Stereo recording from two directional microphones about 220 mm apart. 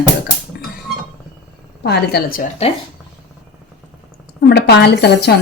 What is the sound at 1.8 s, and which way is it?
Speech, 45° left (ahead or behind).